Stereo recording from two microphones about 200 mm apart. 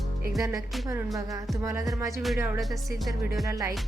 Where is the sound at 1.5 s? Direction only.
15° right (ahead or behind).